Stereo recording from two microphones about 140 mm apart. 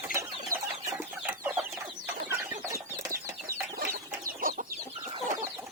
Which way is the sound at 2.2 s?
20° right (ahead or behind).